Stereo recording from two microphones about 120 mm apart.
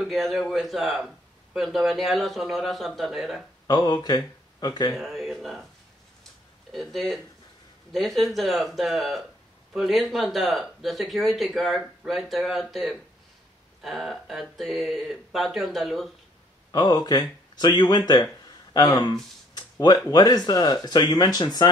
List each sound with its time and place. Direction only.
0.0 s a man's voice: centre (ahead or behind)
3.6 s speech: 35° left (ahead or behind)
4.9 s a man's voice: centre (ahead or behind)
6.7 s a man's voice: centre (ahead or behind)
16.7 s speech: 35° left (ahead or behind)
19.5 s a sound: 35° left (ahead or behind)
20.1 s speech: 35° left (ahead or behind)